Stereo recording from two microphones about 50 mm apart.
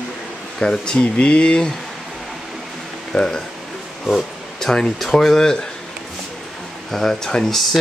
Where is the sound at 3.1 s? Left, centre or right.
Centre.